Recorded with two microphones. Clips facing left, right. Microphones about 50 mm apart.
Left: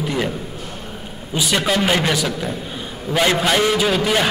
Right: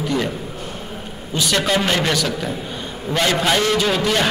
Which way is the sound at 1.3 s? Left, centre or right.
Centre.